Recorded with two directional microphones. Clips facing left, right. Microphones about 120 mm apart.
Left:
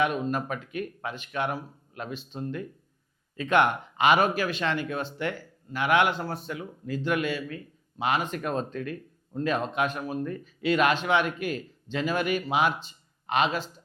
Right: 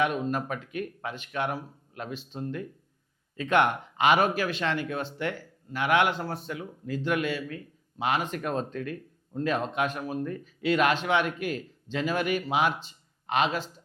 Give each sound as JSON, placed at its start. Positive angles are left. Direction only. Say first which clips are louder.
{"t": 0.0, "sound": "speech", "louder": "left 1 dB", "side_deg": 15}